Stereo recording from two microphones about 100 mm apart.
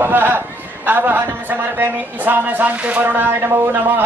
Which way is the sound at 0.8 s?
20° right (ahead or behind).